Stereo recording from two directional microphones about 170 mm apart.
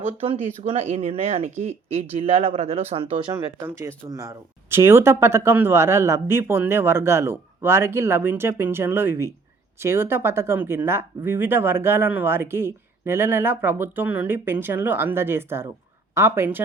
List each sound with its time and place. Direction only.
0.2 s speech: 40° right (ahead or behind)
3.7 s speech: 15° right (ahead or behind)